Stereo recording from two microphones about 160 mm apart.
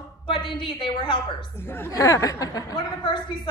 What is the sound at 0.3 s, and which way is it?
Speech, 30° left (ahead or behind).